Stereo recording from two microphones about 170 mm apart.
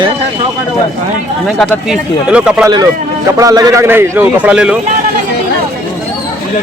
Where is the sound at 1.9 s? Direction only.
5° right (ahead or behind).